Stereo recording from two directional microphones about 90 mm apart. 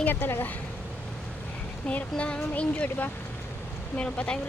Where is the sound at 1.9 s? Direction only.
15° left (ahead or behind).